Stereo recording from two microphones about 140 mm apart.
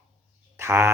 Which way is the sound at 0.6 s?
20° right (ahead or behind).